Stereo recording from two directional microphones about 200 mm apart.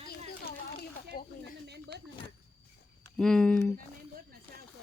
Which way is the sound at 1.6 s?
55° right (ahead or behind).